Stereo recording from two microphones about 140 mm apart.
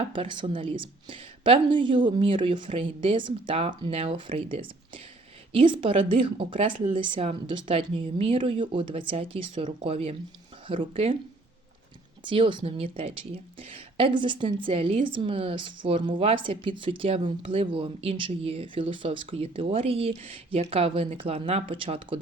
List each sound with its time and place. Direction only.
0.0 s speech: 35° right (ahead or behind)
12.3 s speech: 35° right (ahead or behind)